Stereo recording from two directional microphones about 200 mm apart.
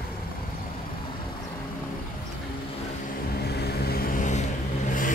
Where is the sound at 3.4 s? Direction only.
55° left (ahead or behind); by 4.5 s 40° left (ahead or behind).